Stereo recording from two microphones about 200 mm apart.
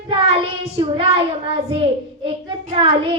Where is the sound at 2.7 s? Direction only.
25° right (ahead or behind).